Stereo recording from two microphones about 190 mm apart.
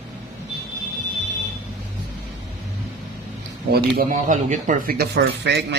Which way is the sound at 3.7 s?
55° right (ahead or behind).